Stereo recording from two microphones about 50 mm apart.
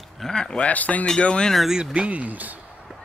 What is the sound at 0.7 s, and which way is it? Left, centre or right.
Speech, left.